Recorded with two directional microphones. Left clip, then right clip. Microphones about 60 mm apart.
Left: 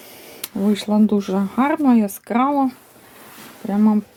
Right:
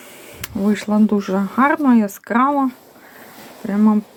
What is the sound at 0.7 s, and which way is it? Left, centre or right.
Speech, right.